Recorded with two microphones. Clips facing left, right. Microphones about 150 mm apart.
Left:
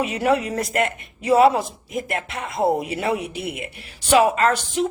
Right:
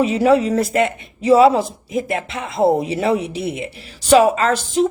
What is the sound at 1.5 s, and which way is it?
Speech, 30° right (ahead or behind).